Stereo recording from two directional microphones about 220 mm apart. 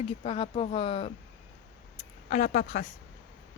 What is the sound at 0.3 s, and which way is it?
Speech, 25° left (ahead or behind).